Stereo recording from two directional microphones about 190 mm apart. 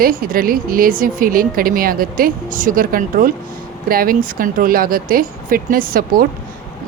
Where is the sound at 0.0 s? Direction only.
50° right (ahead or behind).